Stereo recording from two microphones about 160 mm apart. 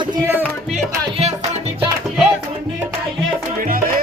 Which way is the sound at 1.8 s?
10° right (ahead or behind).